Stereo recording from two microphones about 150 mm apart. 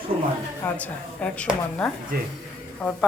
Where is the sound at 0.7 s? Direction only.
10° left (ahead or behind).